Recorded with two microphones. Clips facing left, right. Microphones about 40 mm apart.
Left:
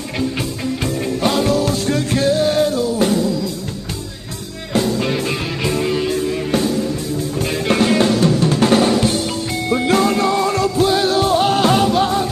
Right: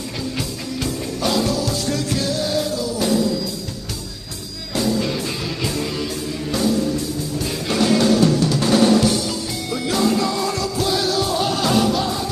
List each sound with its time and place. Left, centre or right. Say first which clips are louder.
0.4 s music: left 4 dB; left
4.7 s music: left 3 dB; left